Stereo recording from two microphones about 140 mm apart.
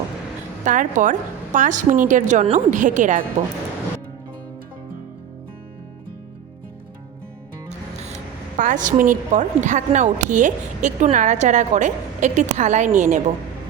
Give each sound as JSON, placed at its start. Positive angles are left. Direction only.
{"t": 0.6, "sound": "speech", "side_deg": -65}
{"t": 8.0, "sound": "speech", "side_deg": -60}